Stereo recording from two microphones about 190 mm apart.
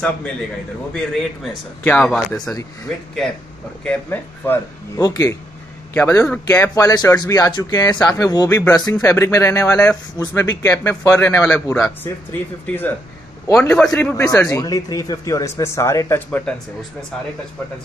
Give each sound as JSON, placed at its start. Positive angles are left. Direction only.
{"t": 0.9, "sound": "speech", "side_deg": 5}
{"t": 3.8, "sound": "a man's voice", "side_deg": 10}